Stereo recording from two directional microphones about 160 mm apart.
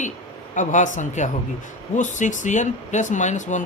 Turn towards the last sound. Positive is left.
turn(degrees=50)  # may be behind; listen again after turning